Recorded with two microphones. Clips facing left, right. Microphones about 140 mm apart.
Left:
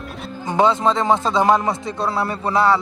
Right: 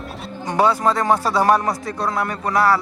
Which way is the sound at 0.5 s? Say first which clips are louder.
Left 1 dB; 20° left (ahead or behind).